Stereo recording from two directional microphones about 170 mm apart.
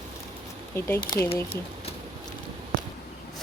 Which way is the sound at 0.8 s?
15° left (ahead or behind).